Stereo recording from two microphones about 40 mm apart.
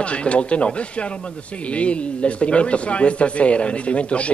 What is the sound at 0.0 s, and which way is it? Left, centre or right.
A man's voice, left.